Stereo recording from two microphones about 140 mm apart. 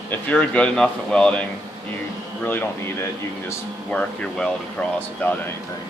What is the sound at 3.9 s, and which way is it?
Speech, 5° left (ahead or behind).